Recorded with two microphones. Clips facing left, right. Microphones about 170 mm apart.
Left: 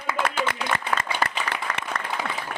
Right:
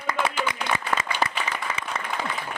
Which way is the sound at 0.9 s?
Centre (ahead or behind).